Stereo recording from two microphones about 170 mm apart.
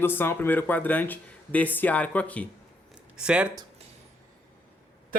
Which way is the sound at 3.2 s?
5° right (ahead or behind).